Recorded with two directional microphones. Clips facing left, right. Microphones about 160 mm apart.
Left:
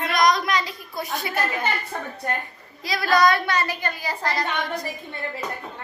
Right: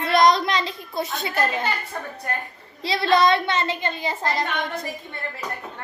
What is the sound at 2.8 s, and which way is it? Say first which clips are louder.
A woman's voice: right 1 dB; 25° right (ahead or behind).